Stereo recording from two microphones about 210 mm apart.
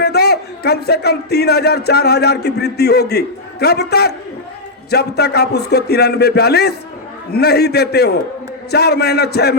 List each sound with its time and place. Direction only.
0.0 s a man's voice: 50° left (ahead or behind)